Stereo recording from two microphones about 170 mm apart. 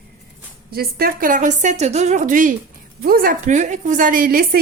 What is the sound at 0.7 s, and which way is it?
A woman's voice, 65° right (ahead or behind).